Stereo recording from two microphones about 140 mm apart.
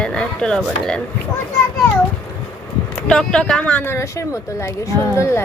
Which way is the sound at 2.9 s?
5° left (ahead or behind).